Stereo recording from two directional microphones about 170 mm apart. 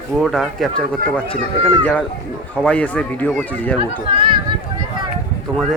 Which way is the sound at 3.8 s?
30° right (ahead or behind).